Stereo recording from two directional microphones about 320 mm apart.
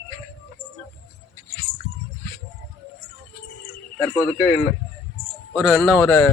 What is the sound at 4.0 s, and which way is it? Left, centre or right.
Speech, centre.